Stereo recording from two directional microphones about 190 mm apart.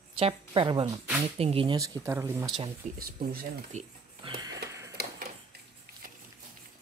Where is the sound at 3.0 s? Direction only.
50° right (ahead or behind).